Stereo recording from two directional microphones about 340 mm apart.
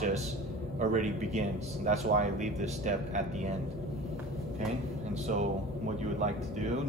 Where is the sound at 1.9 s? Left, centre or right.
Centre.